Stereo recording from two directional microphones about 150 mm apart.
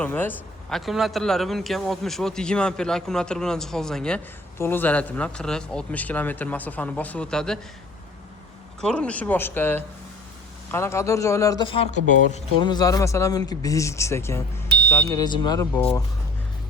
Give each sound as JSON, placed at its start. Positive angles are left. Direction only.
{"t": 0.0, "sound": "a man's voice", "side_deg": 10}
{"t": 0.7, "sound": "a man's voice", "side_deg": 0}
{"t": 4.5, "sound": "a man's voice", "side_deg": 15}
{"t": 8.8, "sound": "a man's voice", "side_deg": 5}
{"t": 11.6, "sound": "speech", "side_deg": 40}
{"t": 12.5, "sound": "speech", "side_deg": 30}
{"t": 15.2, "sound": "speech", "side_deg": 25}